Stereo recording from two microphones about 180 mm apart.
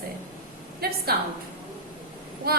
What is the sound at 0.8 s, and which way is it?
Speech, 60° right (ahead or behind).